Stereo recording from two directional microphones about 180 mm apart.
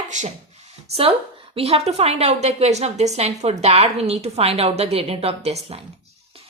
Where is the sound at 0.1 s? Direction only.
40° right (ahead or behind).